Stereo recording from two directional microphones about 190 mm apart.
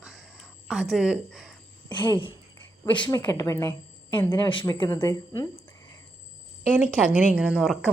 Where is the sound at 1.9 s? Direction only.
25° left (ahead or behind).